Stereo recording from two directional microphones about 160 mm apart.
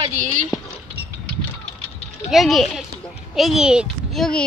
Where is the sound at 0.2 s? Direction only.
50° right (ahead or behind).